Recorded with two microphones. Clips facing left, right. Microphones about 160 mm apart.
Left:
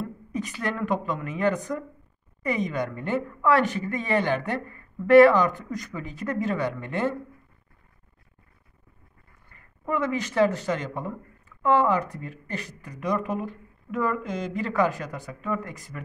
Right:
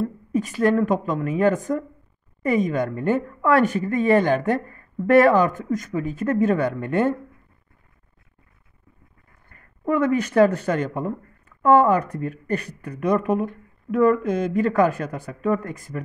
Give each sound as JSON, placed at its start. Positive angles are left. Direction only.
{"t": 0.0, "sound": "speech", "side_deg": -40}
{"t": 9.5, "sound": "speech", "side_deg": -50}